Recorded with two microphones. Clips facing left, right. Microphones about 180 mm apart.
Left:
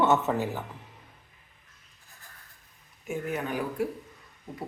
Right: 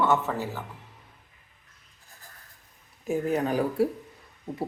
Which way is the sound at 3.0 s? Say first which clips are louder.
Right 6 dB; 35° right (ahead or behind).